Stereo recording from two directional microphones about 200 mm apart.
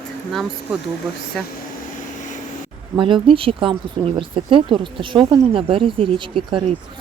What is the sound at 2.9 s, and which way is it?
Speech, 25° right (ahead or behind).